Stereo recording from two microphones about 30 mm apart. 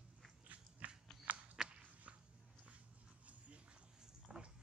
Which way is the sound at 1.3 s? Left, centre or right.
Right.